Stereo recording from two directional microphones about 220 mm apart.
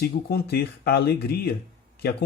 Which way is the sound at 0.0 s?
45° left (ahead or behind).